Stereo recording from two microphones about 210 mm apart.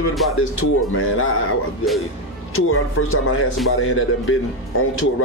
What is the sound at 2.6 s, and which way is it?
Speech, 75° left (ahead or behind).